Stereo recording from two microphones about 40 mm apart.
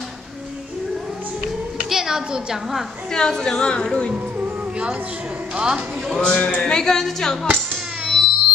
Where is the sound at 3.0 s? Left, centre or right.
Centre.